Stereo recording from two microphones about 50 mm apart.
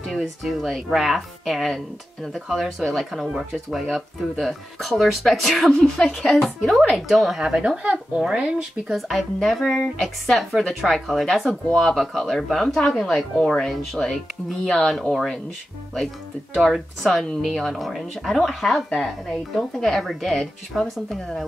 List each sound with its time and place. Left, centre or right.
0.2 s speech: centre
7.3 s speech: centre
8.9 s speech: centre
16.5 s speech: centre